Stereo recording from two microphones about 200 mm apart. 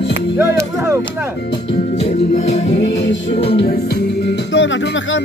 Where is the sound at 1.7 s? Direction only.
30° left (ahead or behind).